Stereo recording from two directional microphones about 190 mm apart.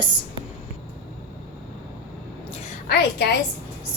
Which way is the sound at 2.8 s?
55° left (ahead or behind).